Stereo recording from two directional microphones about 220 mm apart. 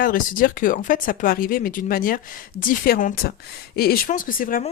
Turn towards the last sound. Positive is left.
turn(degrees=40)  # may be behind; listen again after turning